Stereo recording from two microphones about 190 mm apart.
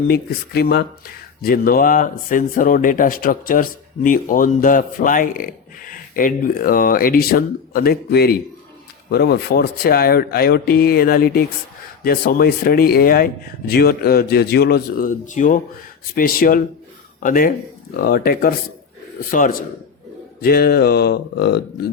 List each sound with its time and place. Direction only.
0.1 s speech: 55° left (ahead or behind)